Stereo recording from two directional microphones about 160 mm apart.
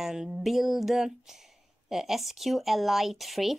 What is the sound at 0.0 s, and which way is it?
Speech, 5° right (ahead or behind).